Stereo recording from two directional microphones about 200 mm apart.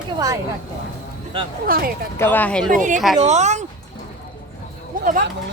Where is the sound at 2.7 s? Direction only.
40° right (ahead or behind).